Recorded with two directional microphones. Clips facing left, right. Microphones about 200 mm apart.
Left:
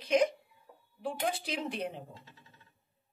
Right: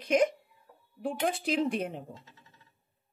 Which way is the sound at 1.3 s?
50° right (ahead or behind).